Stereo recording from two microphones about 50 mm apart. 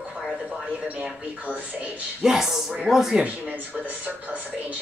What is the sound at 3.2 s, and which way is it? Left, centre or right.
Speech, right.